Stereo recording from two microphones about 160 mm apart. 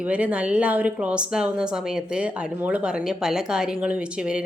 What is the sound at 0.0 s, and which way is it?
A woman's voice, 10° right (ahead or behind).